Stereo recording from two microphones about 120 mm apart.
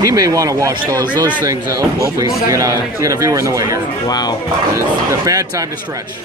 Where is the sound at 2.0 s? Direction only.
30° right (ahead or behind).